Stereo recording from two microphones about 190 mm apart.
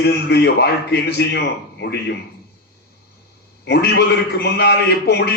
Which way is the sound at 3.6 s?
60° left (ahead or behind).